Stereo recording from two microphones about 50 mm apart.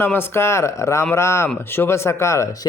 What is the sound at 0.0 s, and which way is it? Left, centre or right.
Speech, left.